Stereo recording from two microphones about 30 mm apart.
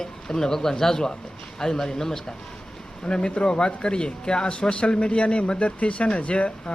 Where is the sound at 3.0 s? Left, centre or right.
Left.